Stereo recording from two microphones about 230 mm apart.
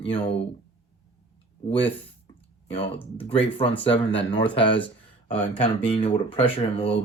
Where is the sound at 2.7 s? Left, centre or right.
Left.